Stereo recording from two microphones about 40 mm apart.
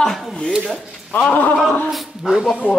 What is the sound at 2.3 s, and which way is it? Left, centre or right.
Speech, centre.